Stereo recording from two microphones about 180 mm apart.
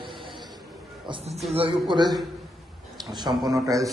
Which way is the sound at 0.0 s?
25° right (ahead or behind).